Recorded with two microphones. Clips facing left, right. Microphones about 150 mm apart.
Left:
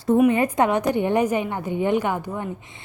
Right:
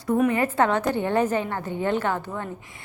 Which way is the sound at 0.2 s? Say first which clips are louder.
Left 2 dB; 20° left (ahead or behind).